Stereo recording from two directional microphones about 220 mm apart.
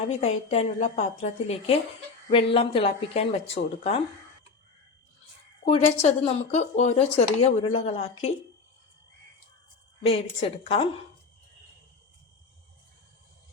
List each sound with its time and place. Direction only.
0.1 s a woman's voice: 30° left (ahead or behind)
5.6 s speech: 30° left (ahead or behind)
10.6 s speech: 25° left (ahead or behind)